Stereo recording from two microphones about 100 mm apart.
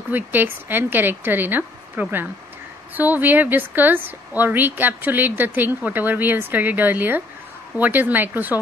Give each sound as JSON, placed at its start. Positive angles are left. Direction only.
{"t": 0.1, "sound": "a woman's voice", "side_deg": -20}